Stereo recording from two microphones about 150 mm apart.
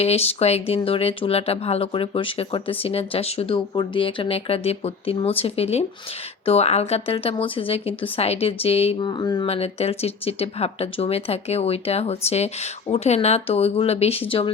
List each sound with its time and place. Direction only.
0.0 s speech: 45° left (ahead or behind)
9.5 s speech: 45° left (ahead or behind)